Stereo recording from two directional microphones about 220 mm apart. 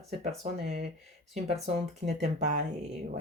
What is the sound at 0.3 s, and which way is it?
Speech, 30° right (ahead or behind).